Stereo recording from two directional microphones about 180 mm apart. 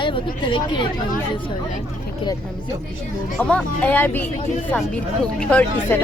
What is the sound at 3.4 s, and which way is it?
Speech, 5° left (ahead or behind).